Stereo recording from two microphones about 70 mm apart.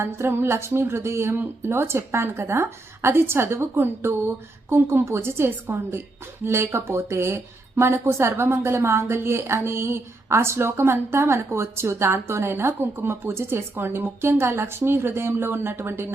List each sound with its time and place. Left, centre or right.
0.0 s a woman's voice: right